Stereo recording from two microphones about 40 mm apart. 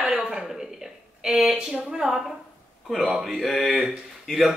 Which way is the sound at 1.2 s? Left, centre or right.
Centre.